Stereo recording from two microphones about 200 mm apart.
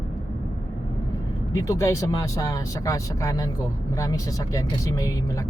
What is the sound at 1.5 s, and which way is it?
Speech, 15° left (ahead or behind).